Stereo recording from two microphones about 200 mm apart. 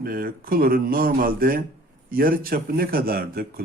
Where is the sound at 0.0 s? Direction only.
45° right (ahead or behind).